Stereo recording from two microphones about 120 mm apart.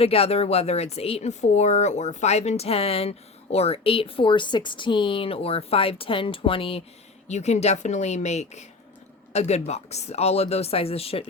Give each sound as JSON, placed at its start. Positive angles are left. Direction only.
{"t": 0.0, "sound": "speech", "side_deg": 55}
{"t": 7.3, "sound": "speech", "side_deg": 70}